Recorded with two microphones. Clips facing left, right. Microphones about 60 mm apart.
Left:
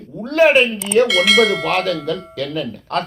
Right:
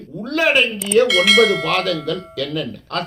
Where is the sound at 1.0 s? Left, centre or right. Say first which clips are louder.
Even; centre.